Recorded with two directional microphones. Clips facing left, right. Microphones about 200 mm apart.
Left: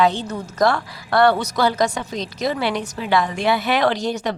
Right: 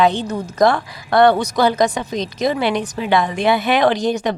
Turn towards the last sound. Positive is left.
turn(degrees=-15)  # may be behind; listen again after turning